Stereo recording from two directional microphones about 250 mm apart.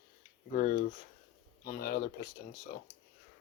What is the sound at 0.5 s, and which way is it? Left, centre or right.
Speech, left.